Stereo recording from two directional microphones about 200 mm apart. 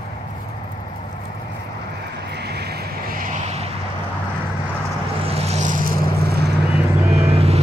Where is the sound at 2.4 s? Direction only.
55° right (ahead or behind); by 3.6 s 35° right (ahead or behind).